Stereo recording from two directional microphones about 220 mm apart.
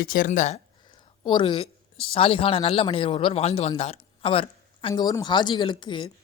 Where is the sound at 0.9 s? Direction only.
20° left (ahead or behind).